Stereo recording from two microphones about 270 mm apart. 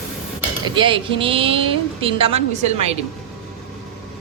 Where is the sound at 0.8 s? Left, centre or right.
Centre.